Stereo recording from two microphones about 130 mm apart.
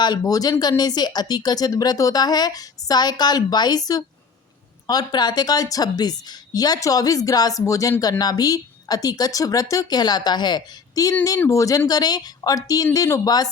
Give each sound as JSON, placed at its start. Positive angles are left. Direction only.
{"t": 0.0, "sound": "speech", "side_deg": 30}